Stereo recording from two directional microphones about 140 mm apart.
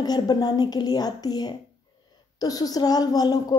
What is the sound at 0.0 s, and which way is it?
A woman's voice, 30° left (ahead or behind).